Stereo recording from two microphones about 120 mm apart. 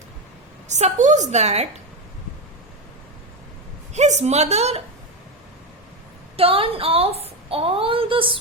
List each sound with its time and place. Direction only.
0.7 s a woman's voice: 80° right; by 1.6 s 65° right (ahead or behind)
3.9 s a woman's voice: 75° right (ahead or behind)
6.3 s a woman's voice: 50° right (ahead or behind)